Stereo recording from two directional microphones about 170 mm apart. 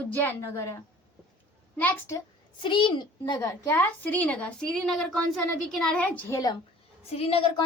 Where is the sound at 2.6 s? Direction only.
30° left (ahead or behind).